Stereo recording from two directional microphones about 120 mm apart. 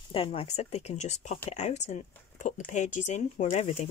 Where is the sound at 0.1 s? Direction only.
50° left (ahead or behind).